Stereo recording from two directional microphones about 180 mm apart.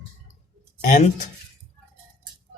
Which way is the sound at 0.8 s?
40° left (ahead or behind).